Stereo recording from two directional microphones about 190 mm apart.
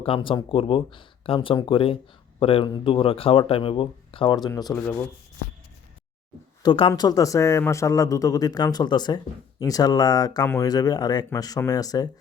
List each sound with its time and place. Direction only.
0.0 s speech: 25° left (ahead or behind)
4.7 s speech: 15° left (ahead or behind)
6.6 s speech: 25° left (ahead or behind)